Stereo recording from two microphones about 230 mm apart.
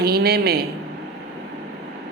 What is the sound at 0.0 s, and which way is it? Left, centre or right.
Speech, right.